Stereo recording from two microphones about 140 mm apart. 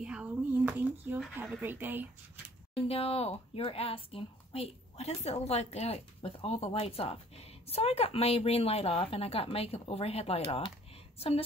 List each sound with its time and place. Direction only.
0.0 s a sound: 5° right (ahead or behind)
1.4 s speech: 15° right (ahead or behind)
2.7 s speech: 45° left (ahead or behind)